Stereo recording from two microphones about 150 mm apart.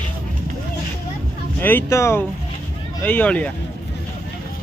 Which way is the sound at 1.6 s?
15° left (ahead or behind).